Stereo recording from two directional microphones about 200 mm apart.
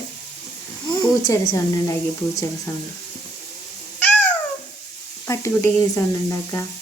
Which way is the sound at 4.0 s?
10° left (ahead or behind).